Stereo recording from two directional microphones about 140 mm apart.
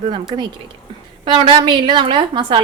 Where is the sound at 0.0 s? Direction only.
35° right (ahead or behind).